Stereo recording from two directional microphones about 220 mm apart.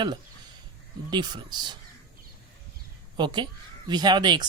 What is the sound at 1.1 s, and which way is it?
Speech, 20° right (ahead or behind).